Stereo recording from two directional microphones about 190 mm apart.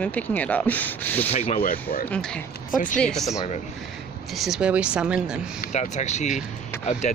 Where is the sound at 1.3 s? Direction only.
35° left (ahead or behind).